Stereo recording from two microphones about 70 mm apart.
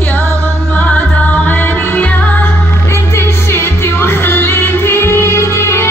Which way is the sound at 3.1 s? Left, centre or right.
Left.